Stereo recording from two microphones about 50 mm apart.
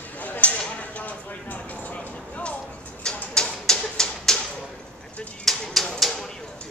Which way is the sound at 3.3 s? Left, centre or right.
Centre.